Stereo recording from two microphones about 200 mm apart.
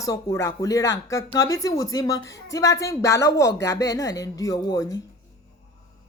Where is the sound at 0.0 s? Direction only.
15° left (ahead or behind).